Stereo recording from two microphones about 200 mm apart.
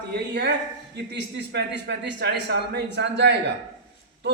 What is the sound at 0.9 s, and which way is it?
A man's voice, 55° right (ahead or behind).